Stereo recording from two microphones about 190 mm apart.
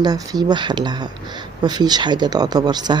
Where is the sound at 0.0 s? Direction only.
20° right (ahead or behind).